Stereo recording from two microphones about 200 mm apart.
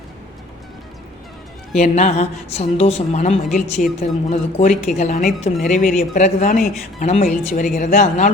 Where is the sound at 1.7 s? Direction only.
35° left (ahead or behind).